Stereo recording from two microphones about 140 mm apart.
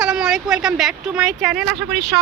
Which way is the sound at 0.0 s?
5° right (ahead or behind).